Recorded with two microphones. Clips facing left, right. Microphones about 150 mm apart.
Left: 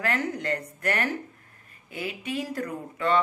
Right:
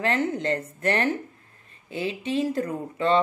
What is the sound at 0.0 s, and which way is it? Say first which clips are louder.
Speech: right 4 dB; 25° right (ahead or behind).